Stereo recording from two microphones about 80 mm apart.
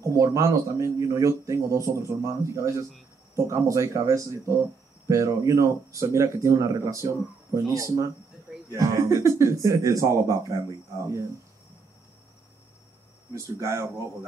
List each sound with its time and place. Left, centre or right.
0.0 s speech: right
13.3 s speech: right